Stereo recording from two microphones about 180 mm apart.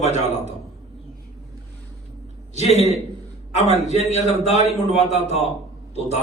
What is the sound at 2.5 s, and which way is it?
A man's voice, 35° left (ahead or behind).